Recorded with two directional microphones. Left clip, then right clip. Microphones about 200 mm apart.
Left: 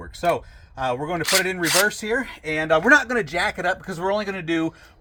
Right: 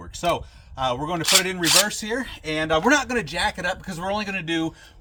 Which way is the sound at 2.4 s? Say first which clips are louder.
Left 1 dB; 5° left (ahead or behind).